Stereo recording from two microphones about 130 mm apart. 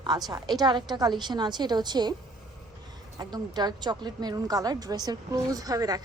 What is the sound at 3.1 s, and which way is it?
A woman's voice, 30° right (ahead or behind).